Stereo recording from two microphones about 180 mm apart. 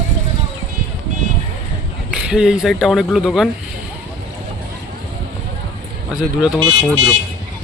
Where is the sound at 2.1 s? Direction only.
5° right (ahead or behind).